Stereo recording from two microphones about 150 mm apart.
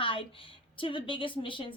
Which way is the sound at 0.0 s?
35° left (ahead or behind).